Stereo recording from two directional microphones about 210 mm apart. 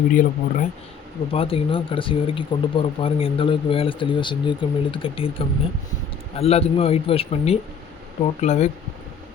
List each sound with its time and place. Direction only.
0.1 s speech: 40° left (ahead or behind)
1.3 s speech: 25° left (ahead or behind)